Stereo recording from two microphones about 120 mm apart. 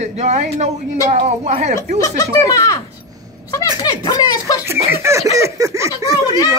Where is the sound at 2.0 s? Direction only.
30° left (ahead or behind).